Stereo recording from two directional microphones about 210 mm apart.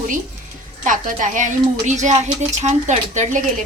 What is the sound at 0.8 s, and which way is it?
A woman's voice, 40° right (ahead or behind).